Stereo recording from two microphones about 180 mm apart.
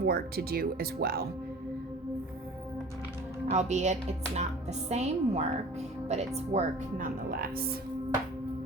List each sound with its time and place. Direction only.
0.0 s speech: 60° right (ahead or behind)
3.5 s a woman's voice: 40° right (ahead or behind)
7.3 s speech: 55° right (ahead or behind)